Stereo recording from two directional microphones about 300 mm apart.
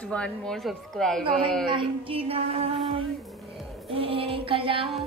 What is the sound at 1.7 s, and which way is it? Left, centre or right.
Female singing, centre.